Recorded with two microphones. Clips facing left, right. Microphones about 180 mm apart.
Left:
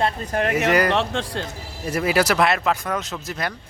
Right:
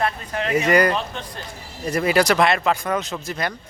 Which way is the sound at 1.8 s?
5° left (ahead or behind).